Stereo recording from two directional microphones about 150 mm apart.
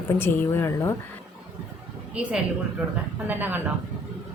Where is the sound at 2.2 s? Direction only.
10° right (ahead or behind).